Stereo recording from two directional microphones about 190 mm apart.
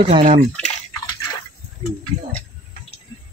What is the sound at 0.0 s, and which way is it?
Speech, 30° right (ahead or behind).